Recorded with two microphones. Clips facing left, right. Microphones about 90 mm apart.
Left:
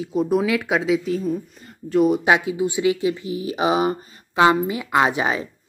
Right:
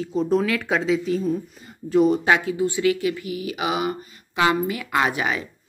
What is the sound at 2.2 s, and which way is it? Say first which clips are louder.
Speech: left 1 dB; 15° left (ahead or behind).